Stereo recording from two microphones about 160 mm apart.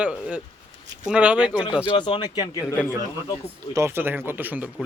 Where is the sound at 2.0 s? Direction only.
30° left (ahead or behind).